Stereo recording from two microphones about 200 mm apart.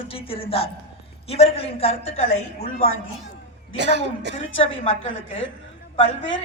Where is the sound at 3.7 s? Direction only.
60° right (ahead or behind).